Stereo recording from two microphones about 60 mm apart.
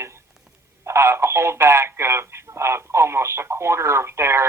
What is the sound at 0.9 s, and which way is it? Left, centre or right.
Speech, right.